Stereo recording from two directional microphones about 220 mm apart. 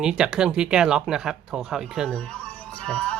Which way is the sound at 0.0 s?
5° right (ahead or behind).